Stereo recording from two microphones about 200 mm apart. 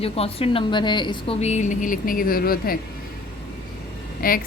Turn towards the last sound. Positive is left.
turn(degrees=45)  # may be behind; listen again after turning